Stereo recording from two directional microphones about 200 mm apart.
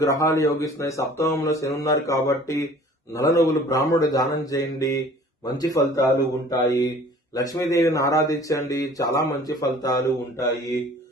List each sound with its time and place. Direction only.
0.0 s speech: 15° left (ahead or behind)